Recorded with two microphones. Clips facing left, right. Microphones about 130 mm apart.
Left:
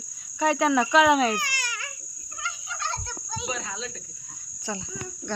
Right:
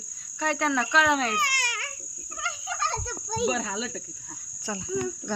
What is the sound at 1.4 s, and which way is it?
Baby cry, 65° right (ahead or behind).